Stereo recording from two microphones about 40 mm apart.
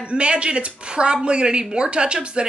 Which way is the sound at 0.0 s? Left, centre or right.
Right.